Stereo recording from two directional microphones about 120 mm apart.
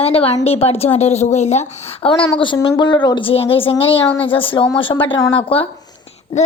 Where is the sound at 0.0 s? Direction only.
55° left (ahead or behind).